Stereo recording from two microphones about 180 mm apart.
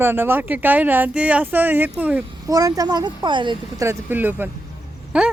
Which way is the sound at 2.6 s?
20° right (ahead or behind).